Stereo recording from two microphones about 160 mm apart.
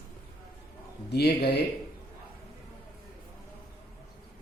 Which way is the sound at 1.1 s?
90° left.